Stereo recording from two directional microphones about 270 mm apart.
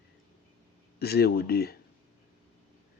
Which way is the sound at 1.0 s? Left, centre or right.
Left.